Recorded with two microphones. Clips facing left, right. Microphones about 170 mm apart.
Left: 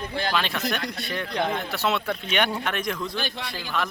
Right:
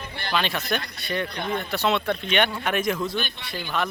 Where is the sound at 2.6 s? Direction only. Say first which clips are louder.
Right 4 dB; 5° right (ahead or behind).